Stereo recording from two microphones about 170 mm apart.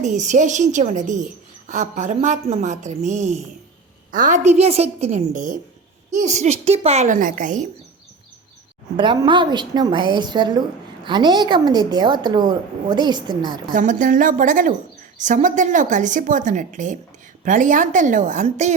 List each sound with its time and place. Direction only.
0.0 s a woman's voice: 45° right (ahead or behind)
9.0 s a woman's voice: 30° right (ahead or behind)
13.7 s a woman's voice: 50° right (ahead or behind)